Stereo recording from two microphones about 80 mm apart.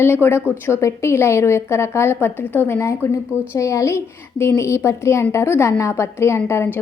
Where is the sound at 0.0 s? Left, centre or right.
Left.